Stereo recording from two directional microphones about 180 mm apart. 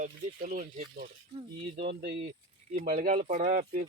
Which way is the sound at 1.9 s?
60° right (ahead or behind).